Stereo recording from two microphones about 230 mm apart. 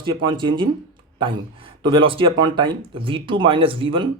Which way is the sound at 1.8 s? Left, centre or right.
Right.